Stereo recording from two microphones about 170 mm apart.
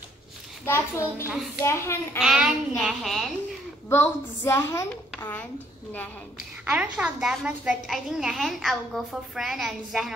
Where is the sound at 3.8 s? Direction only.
15° left (ahead or behind).